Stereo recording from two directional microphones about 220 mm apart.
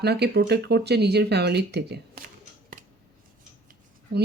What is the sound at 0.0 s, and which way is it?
Speech, 50° right (ahead or behind).